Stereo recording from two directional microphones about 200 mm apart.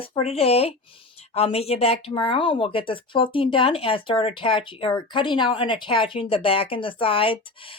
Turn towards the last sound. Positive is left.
turn(degrees=25)  # may be behind; listen again after turning